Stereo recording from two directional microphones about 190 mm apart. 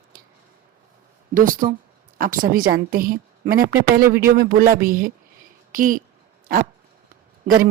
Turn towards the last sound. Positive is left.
turn(degrees=-50)  # may be behind; listen again after turning